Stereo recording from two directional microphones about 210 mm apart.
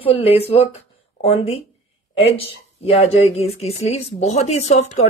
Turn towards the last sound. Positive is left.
turn(degrees=35)  # may be behind; listen again after turning